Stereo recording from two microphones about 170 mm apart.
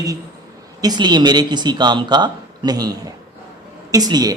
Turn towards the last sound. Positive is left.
turn(degrees=-25)  # may be behind; listen again after turning